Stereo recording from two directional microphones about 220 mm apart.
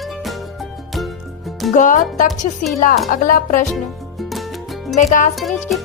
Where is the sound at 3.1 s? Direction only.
40° left (ahead or behind).